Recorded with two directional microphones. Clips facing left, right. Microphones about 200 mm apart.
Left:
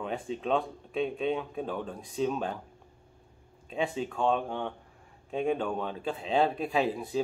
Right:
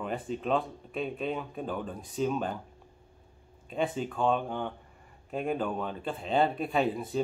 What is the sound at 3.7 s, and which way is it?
Speech, centre (ahead or behind).